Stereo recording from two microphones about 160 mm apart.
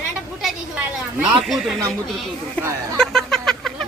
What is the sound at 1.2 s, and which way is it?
Speech, centre (ahead or behind).